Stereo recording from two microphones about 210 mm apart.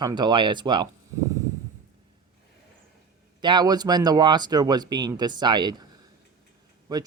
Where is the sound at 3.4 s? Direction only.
20° right (ahead or behind).